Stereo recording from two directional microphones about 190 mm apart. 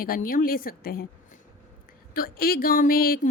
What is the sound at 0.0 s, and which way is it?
A woman's voice, 50° left (ahead or behind).